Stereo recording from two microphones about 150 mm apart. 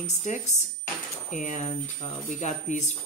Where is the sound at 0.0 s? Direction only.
50° left (ahead or behind).